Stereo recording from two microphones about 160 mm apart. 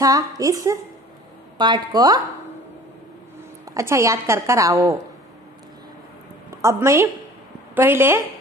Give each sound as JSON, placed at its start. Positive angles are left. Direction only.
{"t": 0.0, "sound": "a woman's voice", "side_deg": -20}
{"t": 3.7, "sound": "a woman's voice", "side_deg": -20}
{"t": 6.6, "sound": "a woman's voice", "side_deg": -15}